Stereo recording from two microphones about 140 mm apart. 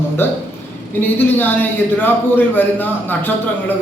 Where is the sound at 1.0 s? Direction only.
15° left (ahead or behind).